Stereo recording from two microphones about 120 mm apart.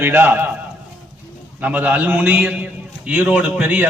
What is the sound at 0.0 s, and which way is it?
Speech, 20° right (ahead or behind).